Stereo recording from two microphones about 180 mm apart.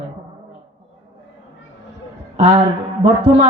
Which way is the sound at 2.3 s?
35° right (ahead or behind).